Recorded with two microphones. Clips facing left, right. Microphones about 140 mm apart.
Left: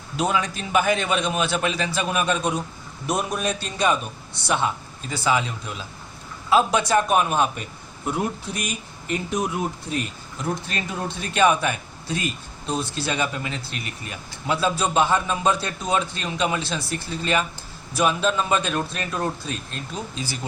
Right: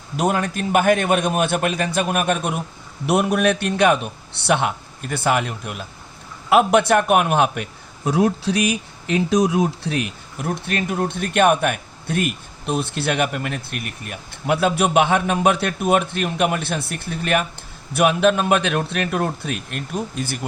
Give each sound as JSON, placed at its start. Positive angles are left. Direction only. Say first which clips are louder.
{"t": 0.2, "sound": "a man's voice", "louder": "right 3 dB", "side_deg": -50}
{"t": 3.1, "sound": "a man's voice", "louder": "right 7 dB", "side_deg": -70}